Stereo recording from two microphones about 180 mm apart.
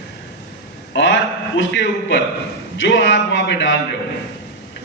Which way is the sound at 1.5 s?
80° left.